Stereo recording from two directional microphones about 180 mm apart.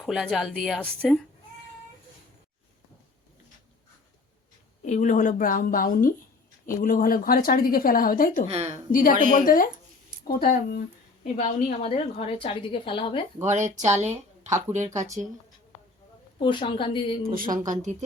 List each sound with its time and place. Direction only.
0.0 s speech: centre (ahead or behind)
4.9 s speech: 45° left (ahead or behind)
8.4 s speech: 35° right (ahead or behind)
8.9 s a woman's voice: 50° left (ahead or behind); by 13.2 s 30° left (ahead or behind)
13.4 s speech: 40° right (ahead or behind)
14.8 s speech: 15° right (ahead or behind)
16.4 s a woman's voice: 25° left (ahead or behind)
17.3 s speech: 50° right (ahead or behind)